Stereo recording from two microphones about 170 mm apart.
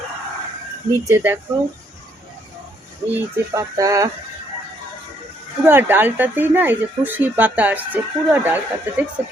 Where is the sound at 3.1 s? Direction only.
20° right (ahead or behind).